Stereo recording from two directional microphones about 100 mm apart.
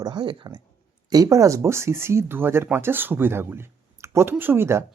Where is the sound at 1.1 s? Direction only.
35° right (ahead or behind).